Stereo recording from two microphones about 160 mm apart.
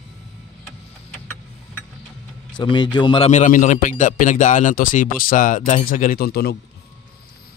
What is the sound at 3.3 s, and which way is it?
A man's voice, 55° left (ahead or behind).